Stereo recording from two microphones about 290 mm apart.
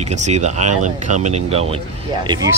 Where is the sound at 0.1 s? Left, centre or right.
Right.